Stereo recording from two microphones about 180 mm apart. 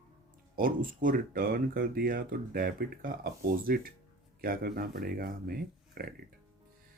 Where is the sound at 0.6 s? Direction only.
50° right (ahead or behind).